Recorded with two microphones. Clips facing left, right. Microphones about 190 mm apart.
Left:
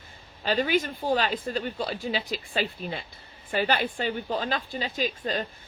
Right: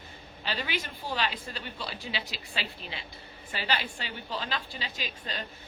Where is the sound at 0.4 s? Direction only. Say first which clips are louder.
Left 10 dB; 45° left (ahead or behind).